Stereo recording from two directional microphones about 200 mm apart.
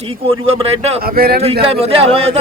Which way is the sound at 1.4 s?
30° right (ahead or behind).